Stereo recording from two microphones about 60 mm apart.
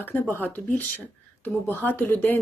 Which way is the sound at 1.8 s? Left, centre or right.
Left.